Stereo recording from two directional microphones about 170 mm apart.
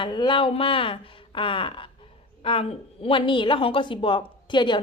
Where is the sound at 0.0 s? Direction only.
25° left (ahead or behind).